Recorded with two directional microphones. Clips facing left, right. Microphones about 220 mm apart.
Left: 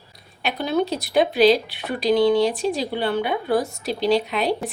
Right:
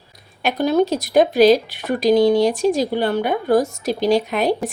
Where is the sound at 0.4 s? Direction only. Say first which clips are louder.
Right 5 dB; 45° right (ahead or behind).